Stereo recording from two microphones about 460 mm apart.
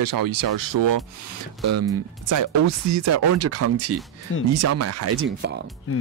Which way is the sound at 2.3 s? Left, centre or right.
Right.